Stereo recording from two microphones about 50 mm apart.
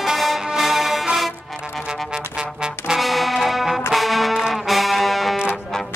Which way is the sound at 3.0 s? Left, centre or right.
Centre.